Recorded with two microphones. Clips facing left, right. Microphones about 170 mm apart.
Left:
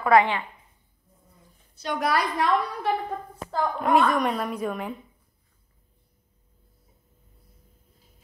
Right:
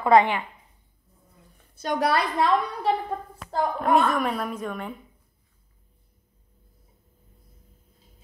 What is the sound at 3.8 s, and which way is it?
A woman's voice, centre (ahead or behind).